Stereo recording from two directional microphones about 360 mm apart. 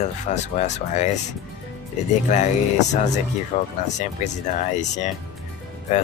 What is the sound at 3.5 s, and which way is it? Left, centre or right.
Speech, centre.